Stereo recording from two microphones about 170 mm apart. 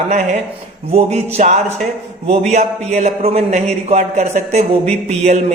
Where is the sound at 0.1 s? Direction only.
45° right (ahead or behind).